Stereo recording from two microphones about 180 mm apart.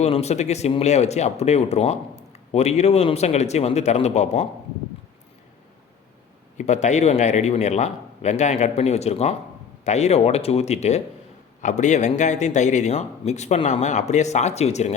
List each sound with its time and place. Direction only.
0.0 s speech: 35° left (ahead or behind)
6.6 s speech: 40° left (ahead or behind)